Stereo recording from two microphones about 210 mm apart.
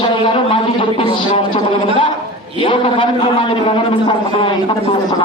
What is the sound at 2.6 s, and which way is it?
A man's voice, 25° left (ahead or behind).